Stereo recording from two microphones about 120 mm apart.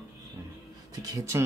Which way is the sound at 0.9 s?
30° right (ahead or behind).